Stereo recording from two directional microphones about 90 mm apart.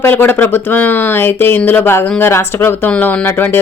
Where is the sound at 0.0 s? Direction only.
25° left (ahead or behind).